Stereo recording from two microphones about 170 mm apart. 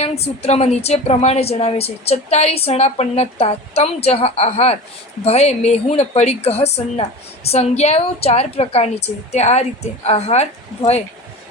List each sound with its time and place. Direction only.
0.0 s a woman's voice: 40° left (ahead or behind)